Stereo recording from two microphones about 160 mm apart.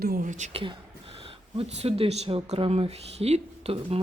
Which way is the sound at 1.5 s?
40° right (ahead or behind).